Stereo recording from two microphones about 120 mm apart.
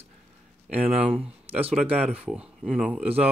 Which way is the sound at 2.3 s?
5° right (ahead or behind).